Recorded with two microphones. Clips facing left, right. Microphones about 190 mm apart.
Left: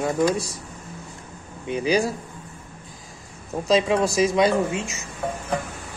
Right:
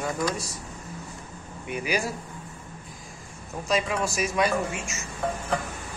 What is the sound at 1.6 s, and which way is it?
Speech, 25° left (ahead or behind).